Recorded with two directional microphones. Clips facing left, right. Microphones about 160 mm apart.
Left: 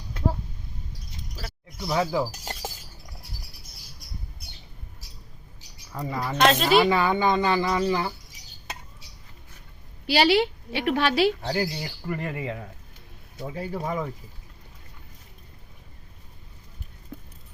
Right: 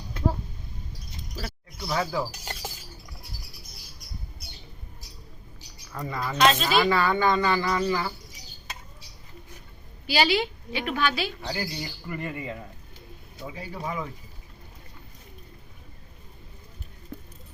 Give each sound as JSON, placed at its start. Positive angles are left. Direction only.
{"t": 1.8, "sound": "speech", "side_deg": 20}
{"t": 2.3, "sound": "a sound", "side_deg": 35}
{"t": 5.9, "sound": "a woman's voice", "side_deg": 10}
{"t": 6.3, "sound": "speech", "side_deg": 60}
{"t": 6.8, "sound": "speech", "side_deg": 20}
{"t": 10.1, "sound": "a woman's voice", "side_deg": 65}
{"t": 11.4, "sound": "a woman's voice", "side_deg": 60}
{"t": 13.5, "sound": "speech", "side_deg": 50}